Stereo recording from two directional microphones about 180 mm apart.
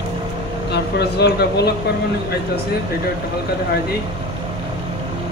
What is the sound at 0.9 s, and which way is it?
Speech, 65° left (ahead or behind).